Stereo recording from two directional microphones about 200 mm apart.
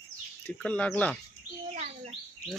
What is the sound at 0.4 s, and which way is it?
Speech, 5° left (ahead or behind).